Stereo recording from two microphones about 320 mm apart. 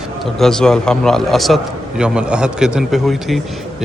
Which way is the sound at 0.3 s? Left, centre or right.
Centre.